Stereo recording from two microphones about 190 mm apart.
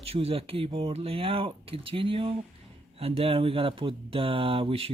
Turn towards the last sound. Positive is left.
turn(degrees=-30)  # may be behind; listen again after turning